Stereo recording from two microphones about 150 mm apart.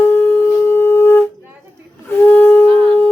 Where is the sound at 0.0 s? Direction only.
15° left (ahead or behind).